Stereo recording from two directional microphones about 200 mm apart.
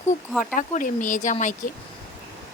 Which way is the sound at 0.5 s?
40° left (ahead or behind).